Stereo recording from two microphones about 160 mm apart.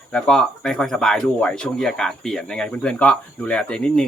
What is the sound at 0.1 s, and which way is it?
Speech, 5° left (ahead or behind).